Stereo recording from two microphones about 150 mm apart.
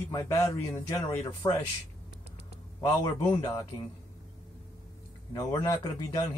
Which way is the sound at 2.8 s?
25° left (ahead or behind).